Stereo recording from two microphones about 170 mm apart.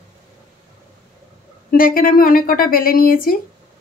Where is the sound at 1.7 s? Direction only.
55° left (ahead or behind).